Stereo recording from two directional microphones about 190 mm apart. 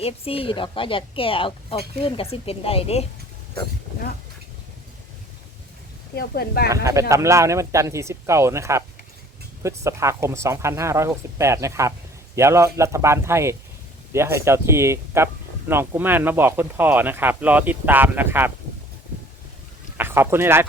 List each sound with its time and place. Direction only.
0.0 s speech: 30° left (ahead or behind)
6.1 s speech: 55° left (ahead or behind)
6.7 s speech: 15° right (ahead or behind)
20.0 s speech: 10° right (ahead or behind)